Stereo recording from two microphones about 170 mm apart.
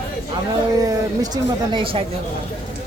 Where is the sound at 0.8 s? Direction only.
20° right (ahead or behind).